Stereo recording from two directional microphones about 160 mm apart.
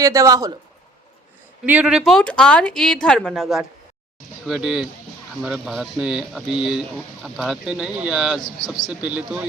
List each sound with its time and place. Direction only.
0.0 s speech: 20° right (ahead or behind)
1.6 s speech: 10° right (ahead or behind)